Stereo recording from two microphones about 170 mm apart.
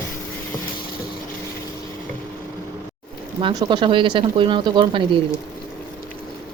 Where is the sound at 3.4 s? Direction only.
30° right (ahead or behind).